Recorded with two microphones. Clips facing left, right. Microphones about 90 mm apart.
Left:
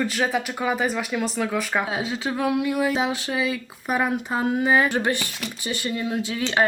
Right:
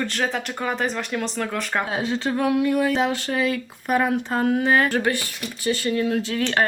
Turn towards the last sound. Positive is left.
turn(degrees=15)  # may be behind; listen again after turning